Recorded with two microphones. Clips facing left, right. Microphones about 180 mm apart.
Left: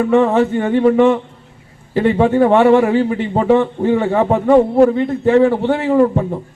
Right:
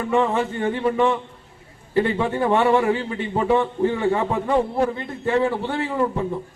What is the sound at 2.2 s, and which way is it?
A man's voice, 70° left (ahead or behind).